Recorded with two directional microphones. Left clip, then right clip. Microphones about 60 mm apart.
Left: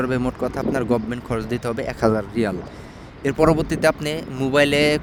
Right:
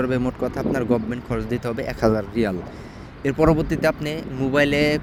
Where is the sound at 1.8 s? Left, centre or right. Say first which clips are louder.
Even; left.